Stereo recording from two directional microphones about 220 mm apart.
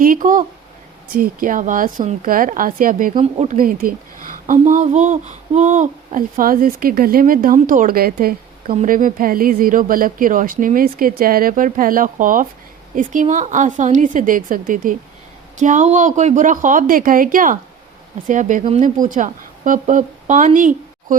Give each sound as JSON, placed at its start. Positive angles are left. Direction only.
{"t": 0.0, "sound": "a woman's voice", "side_deg": -40}
{"t": 3.2, "sound": "a woman's voice", "side_deg": -25}